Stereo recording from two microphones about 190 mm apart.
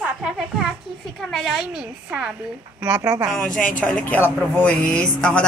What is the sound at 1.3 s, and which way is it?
Speech, centre (ahead or behind).